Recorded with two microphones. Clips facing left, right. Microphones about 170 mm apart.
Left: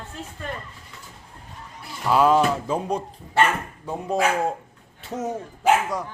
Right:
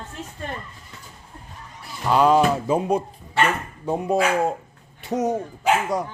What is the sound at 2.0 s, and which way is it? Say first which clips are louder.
Speech: right 1 dB; centre (ahead or behind).